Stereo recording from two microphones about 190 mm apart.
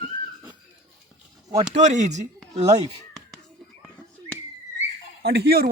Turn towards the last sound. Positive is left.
turn(degrees=-55)  # may be behind; listen again after turning